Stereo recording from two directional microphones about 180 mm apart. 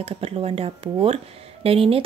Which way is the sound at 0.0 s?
35° right (ahead or behind).